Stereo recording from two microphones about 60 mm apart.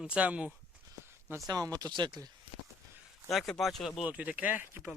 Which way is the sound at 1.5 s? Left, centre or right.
Right.